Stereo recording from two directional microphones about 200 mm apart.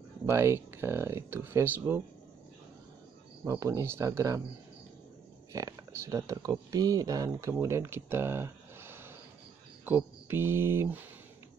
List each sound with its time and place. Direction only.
0.3 s speech: 10° right (ahead or behind)
3.4 s speech: 15° right (ahead or behind)
5.5 s speech: 15° right (ahead or behind)